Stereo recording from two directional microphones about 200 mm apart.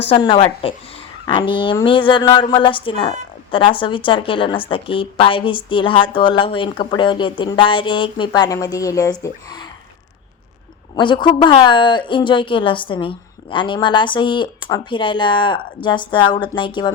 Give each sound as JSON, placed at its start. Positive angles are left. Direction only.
{"t": 0.1, "sound": "speech", "side_deg": 25}
{"t": 10.9, "sound": "speech", "side_deg": 25}